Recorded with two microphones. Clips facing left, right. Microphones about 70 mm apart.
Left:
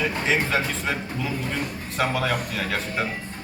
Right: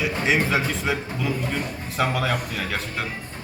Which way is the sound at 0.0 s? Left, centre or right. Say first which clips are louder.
Right 1 dB; centre.